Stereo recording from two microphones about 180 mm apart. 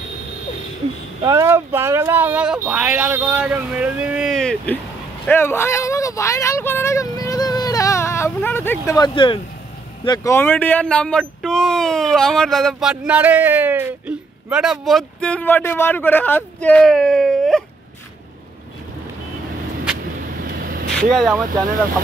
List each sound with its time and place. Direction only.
1.2 s speech: 15° right (ahead or behind); by 4.7 s 5° left (ahead or behind)
5.2 s vehicle: 10° left (ahead or behind)
10.0 s speech: 20° left (ahead or behind); by 17.6 s 5° left (ahead or behind)
20.2 s vehicle: 55° right (ahead or behind)
21.0 s speech: centre (ahead or behind)
21.5 s speech: 50° right (ahead or behind)